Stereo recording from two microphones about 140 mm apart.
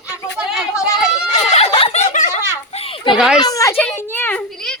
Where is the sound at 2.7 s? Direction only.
45° left (ahead or behind).